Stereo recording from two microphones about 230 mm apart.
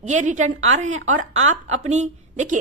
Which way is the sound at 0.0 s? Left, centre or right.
Right.